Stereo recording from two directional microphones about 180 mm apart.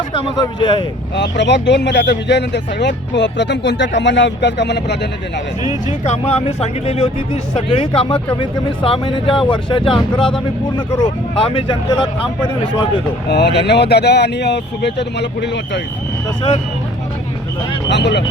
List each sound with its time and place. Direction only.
0.1 s speech: 25° left (ahead or behind)
1.1 s speech: 75° left (ahead or behind)
6.1 s speech: 35° left (ahead or behind)
13.2 s speech: 70° left (ahead or behind)
17.8 s speech: 75° left (ahead or behind)